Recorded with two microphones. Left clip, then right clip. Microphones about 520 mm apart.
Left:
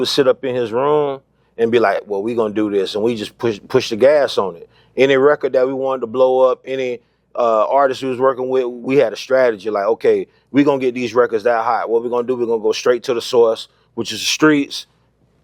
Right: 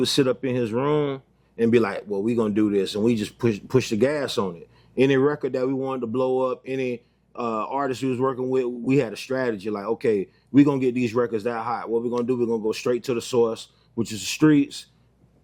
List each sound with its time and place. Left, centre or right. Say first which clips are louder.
0.0 s a man's voice: left 7 dB; left